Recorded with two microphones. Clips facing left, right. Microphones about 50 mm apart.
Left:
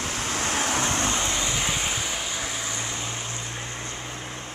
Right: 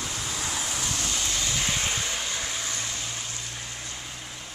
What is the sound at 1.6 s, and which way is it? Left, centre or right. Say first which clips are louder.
Vehicle: left 1 dB; centre.